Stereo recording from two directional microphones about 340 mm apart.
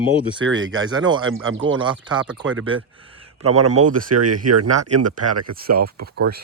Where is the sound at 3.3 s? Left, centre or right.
Right.